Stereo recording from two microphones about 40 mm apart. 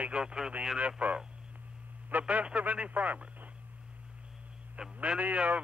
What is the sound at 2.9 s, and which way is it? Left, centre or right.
Speech, right.